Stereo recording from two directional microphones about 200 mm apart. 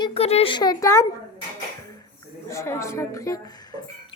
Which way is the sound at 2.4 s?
15° left (ahead or behind).